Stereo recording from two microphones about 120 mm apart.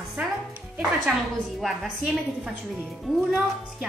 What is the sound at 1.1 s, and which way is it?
A woman's voice, centre (ahead or behind).